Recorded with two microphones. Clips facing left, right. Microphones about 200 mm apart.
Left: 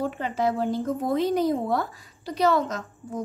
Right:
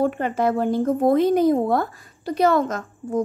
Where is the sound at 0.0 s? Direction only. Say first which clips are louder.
Right 5 dB; 55° right (ahead or behind).